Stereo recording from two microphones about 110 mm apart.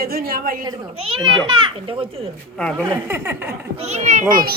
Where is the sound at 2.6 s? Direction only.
10° left (ahead or behind).